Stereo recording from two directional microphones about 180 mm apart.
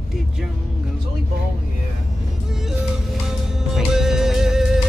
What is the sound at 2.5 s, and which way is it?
Music, centre (ahead or behind).